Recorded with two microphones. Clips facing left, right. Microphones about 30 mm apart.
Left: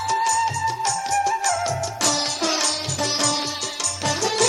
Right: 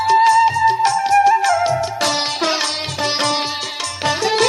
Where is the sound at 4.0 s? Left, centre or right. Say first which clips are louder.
Right 6 dB; right.